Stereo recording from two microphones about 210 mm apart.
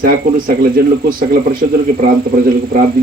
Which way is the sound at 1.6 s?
45° right (ahead or behind).